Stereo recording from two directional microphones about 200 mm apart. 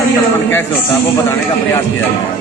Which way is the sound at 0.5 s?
10° left (ahead or behind).